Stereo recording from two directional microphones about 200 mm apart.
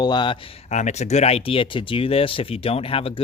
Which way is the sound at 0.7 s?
35° left (ahead or behind).